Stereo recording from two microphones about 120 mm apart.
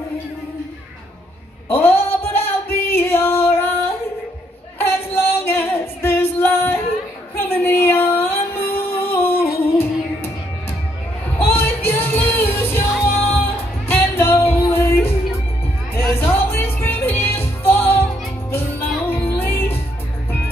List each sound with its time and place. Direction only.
1.7 s a sound: 20° left (ahead or behind)
2.9 s music: 20° left (ahead or behind)
4.7 s female singing: 20° left (ahead or behind)
7.3 s music: 15° left (ahead or behind)
11.3 s music: 20° left (ahead or behind)
19.0 s music: 15° left (ahead or behind)